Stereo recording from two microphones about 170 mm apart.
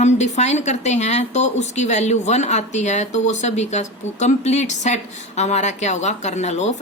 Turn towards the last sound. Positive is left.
turn(degrees=40)  # may be behind; listen again after turning